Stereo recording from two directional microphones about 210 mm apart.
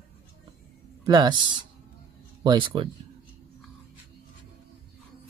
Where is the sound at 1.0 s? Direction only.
20° right (ahead or behind).